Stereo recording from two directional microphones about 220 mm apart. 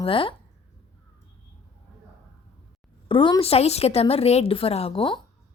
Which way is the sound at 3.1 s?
25° left (ahead or behind).